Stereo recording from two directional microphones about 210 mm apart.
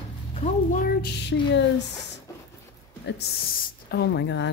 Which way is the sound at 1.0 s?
55° left (ahead or behind).